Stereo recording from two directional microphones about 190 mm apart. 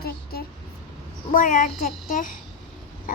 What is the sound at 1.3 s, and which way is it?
A child's voice, 45° left (ahead or behind).